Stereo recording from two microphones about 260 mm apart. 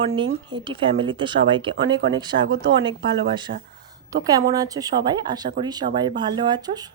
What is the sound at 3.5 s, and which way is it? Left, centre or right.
Speech, right.